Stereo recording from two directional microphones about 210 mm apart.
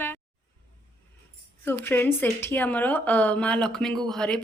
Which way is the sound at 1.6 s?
10° left (ahead or behind).